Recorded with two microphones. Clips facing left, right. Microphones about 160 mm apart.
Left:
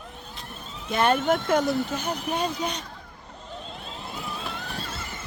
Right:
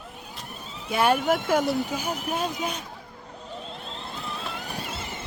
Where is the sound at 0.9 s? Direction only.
10° right (ahead or behind).